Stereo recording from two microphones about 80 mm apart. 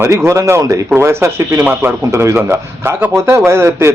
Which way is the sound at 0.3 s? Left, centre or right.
Right.